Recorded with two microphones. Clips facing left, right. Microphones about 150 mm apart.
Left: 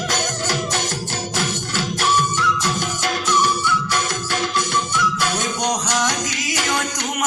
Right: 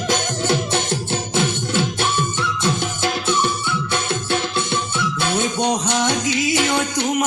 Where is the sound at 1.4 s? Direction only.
25° right (ahead or behind).